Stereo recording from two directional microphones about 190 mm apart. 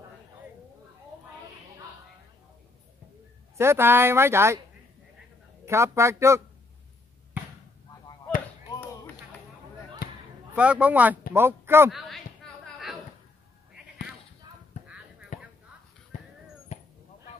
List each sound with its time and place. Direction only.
3.5 s speech: 15° right (ahead or behind)
5.7 s speech: 15° right (ahead or behind)
10.0 s basketball bounce: 55° left (ahead or behind)
10.5 s speech: 5° right (ahead or behind)
15.3 s a sound: 40° left (ahead or behind)
16.7 s a sound: 35° left (ahead or behind)